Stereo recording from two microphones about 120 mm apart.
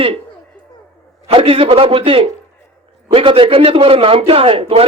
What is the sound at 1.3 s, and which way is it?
A man's voice, 50° right (ahead or behind).